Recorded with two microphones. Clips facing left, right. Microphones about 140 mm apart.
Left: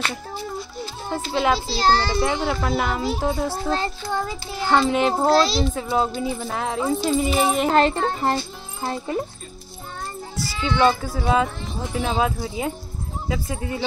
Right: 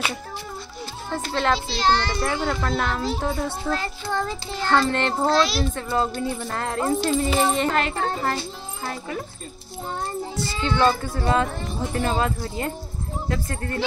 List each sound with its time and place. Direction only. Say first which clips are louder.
1.3 s speech: left 2 dB; 5° left (ahead or behind)
1.8 s speech: left 2 dB; 35° left (ahead or behind)
2.2 s speech: left 2 dB; 15° left (ahead or behind)
3.6 s a child's voice: left 3 dB; 25° left (ahead or behind)
4.1 s speech: even; 5° left (ahead or behind)
5.1 s a child's voice: left 3 dB; 30° left (ahead or behind)
5.8 s speech: left 2 dB; 5° left (ahead or behind)
7.7 s a child's voice: left 5 dB; 35° left (ahead or behind)
10.6 s speech: left 2 dB; 5° left (ahead or behind)